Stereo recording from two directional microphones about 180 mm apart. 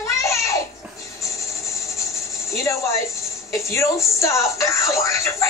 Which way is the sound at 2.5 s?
15° left (ahead or behind).